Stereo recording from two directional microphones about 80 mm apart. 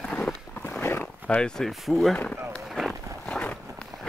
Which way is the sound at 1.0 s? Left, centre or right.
Centre.